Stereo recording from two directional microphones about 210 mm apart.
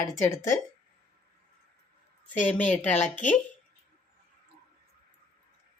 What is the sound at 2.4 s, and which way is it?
Speech, 5° left (ahead or behind).